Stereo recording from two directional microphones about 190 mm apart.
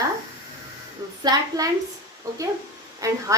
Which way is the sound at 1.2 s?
20° right (ahead or behind).